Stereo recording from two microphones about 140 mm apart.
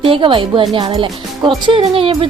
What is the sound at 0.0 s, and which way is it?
Speech, 35° right (ahead or behind).